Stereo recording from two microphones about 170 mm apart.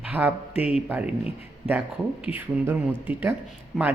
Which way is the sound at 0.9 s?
5° right (ahead or behind).